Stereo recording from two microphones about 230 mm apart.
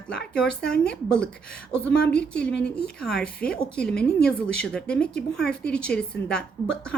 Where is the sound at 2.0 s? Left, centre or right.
Centre.